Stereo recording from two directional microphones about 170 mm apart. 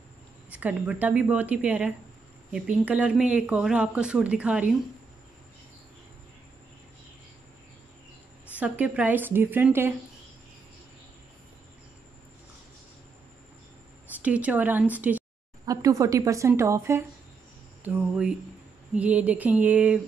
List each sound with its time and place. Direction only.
0.5 s speech: 10° right (ahead or behind)
8.5 s speech: 10° right (ahead or behind)
14.2 s speech: 10° right (ahead or behind)
15.6 s speech: 20° right (ahead or behind)